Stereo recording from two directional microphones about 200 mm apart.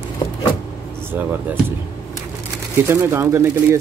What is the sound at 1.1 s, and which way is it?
Speech, 10° right (ahead or behind).